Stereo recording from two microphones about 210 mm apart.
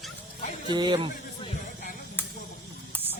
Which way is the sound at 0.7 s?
20° right (ahead or behind).